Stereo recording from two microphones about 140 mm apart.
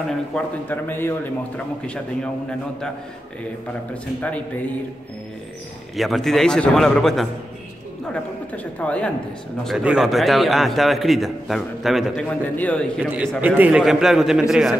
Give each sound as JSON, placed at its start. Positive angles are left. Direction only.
{"t": 0.3, "sound": "a man's voice", "side_deg": 15}
{"t": 3.9, "sound": "a man's voice", "side_deg": 10}
{"t": 5.9, "sound": "a man's voice", "side_deg": 0}
{"t": 8.7, "sound": "a man's voice", "side_deg": 10}
{"t": 12.3, "sound": "a man's voice", "side_deg": 10}
{"t": 13.0, "sound": "a man's voice", "side_deg": -10}